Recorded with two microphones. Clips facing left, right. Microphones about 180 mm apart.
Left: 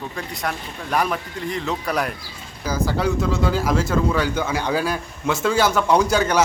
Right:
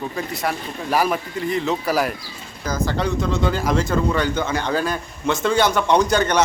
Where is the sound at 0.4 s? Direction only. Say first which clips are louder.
Right 2 dB; 5° right (ahead or behind).